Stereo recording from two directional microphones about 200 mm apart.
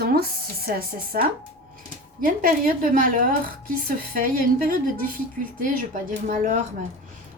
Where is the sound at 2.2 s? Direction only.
45° right (ahead or behind).